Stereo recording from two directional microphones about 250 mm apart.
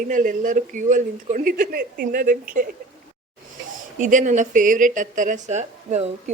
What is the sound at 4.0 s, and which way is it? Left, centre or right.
Speech, right.